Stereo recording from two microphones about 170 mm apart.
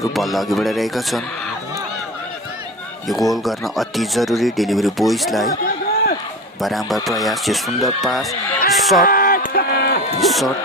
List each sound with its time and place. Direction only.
0.0 s speech: centre (ahead or behind)
3.1 s speech: centre (ahead or behind)
6.6 s speech: centre (ahead or behind)
9.0 s a sound: 60° left (ahead or behind)
10.2 s speech: centre (ahead or behind)